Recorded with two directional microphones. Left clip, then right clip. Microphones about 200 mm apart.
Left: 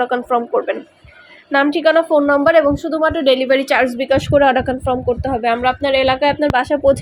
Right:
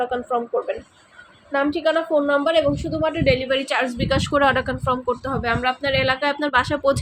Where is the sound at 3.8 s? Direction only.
15° left (ahead or behind).